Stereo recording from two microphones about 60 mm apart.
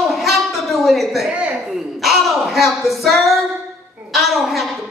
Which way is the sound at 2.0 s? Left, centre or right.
Centre.